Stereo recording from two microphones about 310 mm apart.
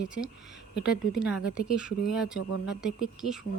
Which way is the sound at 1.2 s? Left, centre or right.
Centre.